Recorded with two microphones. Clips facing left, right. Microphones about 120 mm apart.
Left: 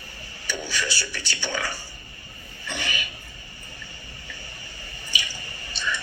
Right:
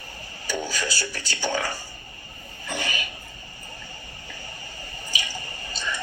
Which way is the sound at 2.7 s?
40° right (ahead or behind).